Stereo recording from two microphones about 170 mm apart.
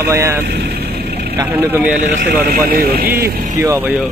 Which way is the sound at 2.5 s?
60° right (ahead or behind).